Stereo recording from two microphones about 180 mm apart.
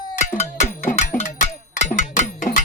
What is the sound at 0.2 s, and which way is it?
Music, 40° left (ahead or behind).